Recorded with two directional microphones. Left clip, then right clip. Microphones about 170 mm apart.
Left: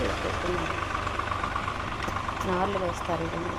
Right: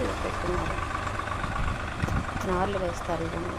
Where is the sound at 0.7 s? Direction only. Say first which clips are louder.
Left 1 dB; 60° right (ahead or behind).